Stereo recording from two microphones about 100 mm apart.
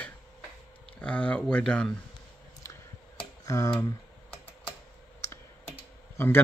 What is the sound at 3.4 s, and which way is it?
Tick-tock, 30° left (ahead or behind).